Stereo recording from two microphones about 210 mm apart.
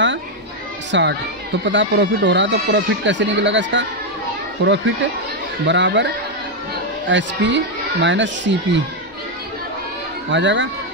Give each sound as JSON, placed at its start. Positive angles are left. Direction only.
{"t": 0.9, "sound": "speech", "side_deg": -60}
{"t": 10.3, "sound": "speech", "side_deg": -60}